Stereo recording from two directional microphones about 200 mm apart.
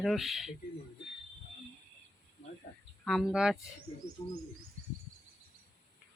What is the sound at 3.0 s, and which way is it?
Speech, centre (ahead or behind).